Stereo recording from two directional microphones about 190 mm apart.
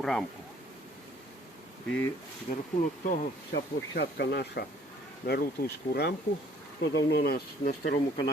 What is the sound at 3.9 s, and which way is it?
Speech, 60° left (ahead or behind).